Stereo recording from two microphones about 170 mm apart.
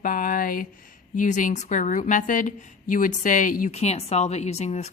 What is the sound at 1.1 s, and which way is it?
A woman's voice, 50° left (ahead or behind).